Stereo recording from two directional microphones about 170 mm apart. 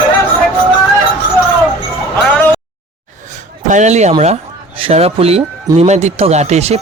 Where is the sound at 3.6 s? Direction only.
45° right (ahead or behind).